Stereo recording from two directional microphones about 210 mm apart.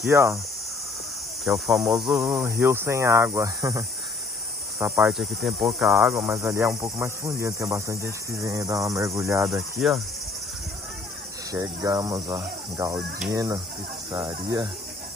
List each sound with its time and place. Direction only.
0.1 s speech: 15° right (ahead or behind)
1.4 s speech: centre (ahead or behind)
6.4 s speech: 10° right (ahead or behind)
9.5 s speech: centre (ahead or behind)
11.5 s speech: 15° right (ahead or behind)